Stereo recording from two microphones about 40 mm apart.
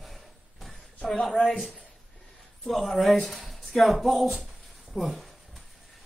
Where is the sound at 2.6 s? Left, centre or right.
Centre.